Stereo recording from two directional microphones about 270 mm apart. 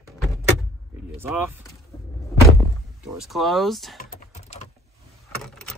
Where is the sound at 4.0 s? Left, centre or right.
Left.